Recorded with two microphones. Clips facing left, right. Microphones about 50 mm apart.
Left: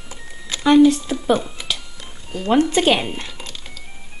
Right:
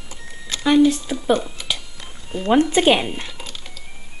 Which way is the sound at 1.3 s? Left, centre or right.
Centre.